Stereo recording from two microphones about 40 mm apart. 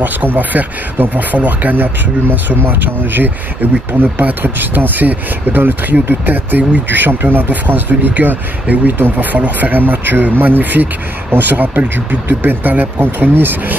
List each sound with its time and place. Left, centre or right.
0.0 s speech: right